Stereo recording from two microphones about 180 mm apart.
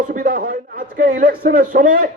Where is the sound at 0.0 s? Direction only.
50° right (ahead or behind).